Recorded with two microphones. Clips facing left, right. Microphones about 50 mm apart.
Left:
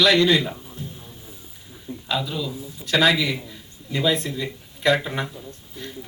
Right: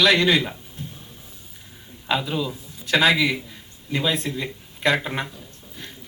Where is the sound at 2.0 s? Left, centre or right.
Right.